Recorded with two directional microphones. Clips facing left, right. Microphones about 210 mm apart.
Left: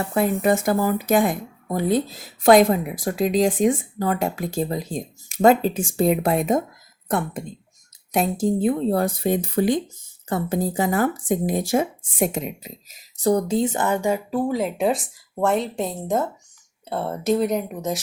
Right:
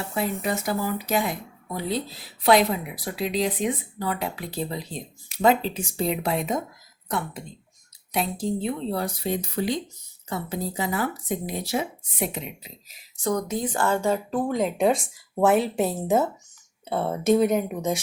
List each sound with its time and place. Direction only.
0.1 s speech: 50° left (ahead or behind)
8.1 s speech: 45° left (ahead or behind); by 18.0 s centre (ahead or behind)